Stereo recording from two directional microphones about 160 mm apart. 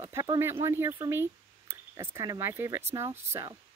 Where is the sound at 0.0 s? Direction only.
20° right (ahead or behind).